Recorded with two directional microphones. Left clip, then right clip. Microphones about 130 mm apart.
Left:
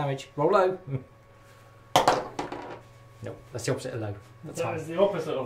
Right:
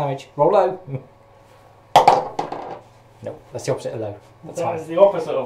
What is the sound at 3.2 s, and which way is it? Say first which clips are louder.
Speech: right 7 dB; 35° left (ahead or behind).